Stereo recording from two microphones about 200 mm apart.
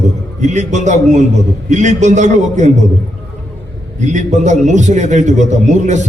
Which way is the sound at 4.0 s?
35° right (ahead or behind).